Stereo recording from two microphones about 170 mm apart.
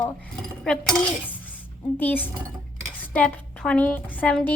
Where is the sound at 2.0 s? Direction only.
10° left (ahead or behind).